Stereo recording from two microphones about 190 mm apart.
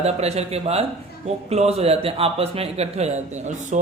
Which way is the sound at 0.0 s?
35° right (ahead or behind).